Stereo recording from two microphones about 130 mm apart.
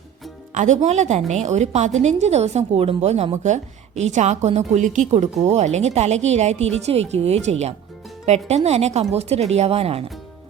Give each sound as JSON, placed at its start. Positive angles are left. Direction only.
{"t": 0.5, "sound": "a woman's voice", "side_deg": -65}
{"t": 3.3, "sound": "a woman's voice", "side_deg": -65}